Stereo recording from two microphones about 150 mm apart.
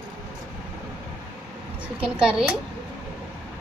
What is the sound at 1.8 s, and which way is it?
Speech, 5° right (ahead or behind).